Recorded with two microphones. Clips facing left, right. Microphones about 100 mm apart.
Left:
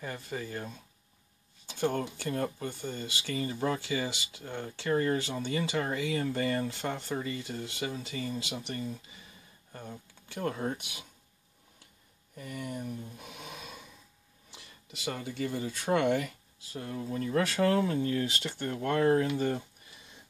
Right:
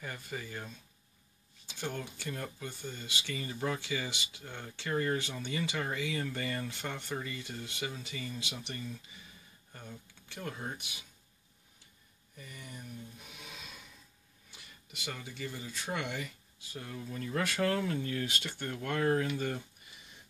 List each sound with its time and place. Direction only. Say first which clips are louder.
0.0 s speech: left 4 dB; 35° left (ahead or behind); by 11.1 s 55° left (ahead or behind)
12.4 s speech: left 10 dB; 65° left (ahead or behind)
13.2 s snort: left 6 dB; 55° left (ahead or behind)
15.0 s speech: left 7 dB; 50° left (ahead or behind)
16.7 s speech: left 6 dB; 35° left (ahead or behind)